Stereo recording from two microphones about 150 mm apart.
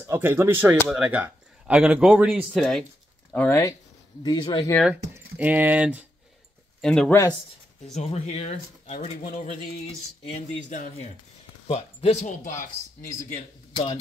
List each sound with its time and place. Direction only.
0.0 s speech: 15° right (ahead or behind); by 2.8 s centre (ahead or behind)
3.3 s speech: 15° left (ahead or behind)
4.2 s speech: 30° left (ahead or behind)
5.1 s speech: 10° right (ahead or behind)
6.8 s speech: 5° left (ahead or behind)
7.8 s speech: 45° left (ahead or behind)
12.3 s speech: 65° left (ahead or behind)